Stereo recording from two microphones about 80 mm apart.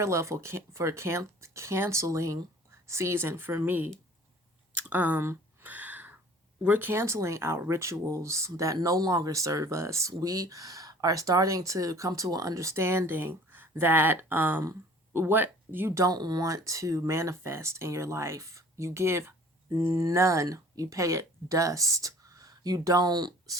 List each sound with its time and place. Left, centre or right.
0.0 s speech: right
5.6 s a sound: right
6.7 s speech: right
16.0 s speech: right